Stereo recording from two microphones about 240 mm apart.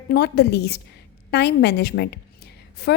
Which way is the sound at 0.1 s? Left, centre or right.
Left.